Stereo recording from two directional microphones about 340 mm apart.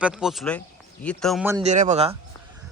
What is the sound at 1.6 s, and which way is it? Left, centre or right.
Speech, right.